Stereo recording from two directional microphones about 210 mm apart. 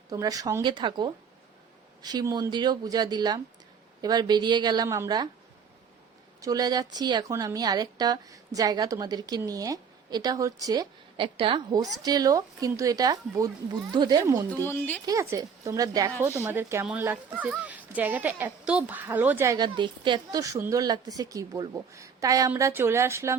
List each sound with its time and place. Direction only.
0.1 s speech: 15° right (ahead or behind)
6.4 s a woman's voice: 15° right (ahead or behind)
14.5 s speech: 10° left (ahead or behind)
15.0 s a woman's voice: 15° right (ahead or behind)